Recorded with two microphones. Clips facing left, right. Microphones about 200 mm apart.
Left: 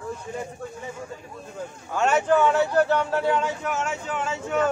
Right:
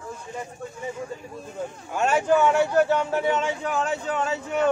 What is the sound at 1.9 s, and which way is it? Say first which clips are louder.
A man's voice: even; 10° right (ahead or behind).